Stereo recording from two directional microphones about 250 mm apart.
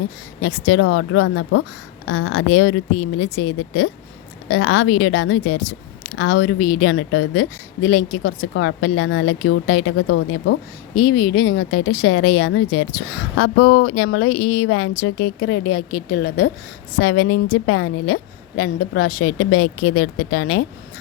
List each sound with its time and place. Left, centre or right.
0.4 s a woman's voice: left
8.5 s a woman's voice: left
10.9 s speech: left
11.5 s a woman's voice: left
16.1 s speech: left
17.0 s speech: left
19.2 s speech: left